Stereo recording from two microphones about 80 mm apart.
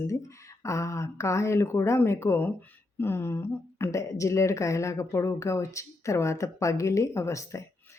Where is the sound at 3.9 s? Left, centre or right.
Left.